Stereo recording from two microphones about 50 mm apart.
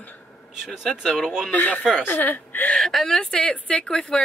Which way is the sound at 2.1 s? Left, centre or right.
Left.